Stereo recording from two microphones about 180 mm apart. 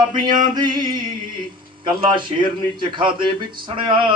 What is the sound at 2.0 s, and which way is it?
A man's voice, 25° right (ahead or behind).